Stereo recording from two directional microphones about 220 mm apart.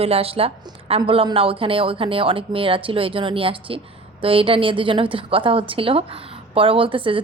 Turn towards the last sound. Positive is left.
turn(degrees=-25)  # may be behind; listen again after turning